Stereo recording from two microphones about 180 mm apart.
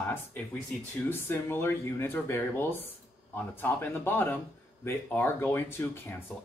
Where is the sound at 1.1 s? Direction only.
15° left (ahead or behind).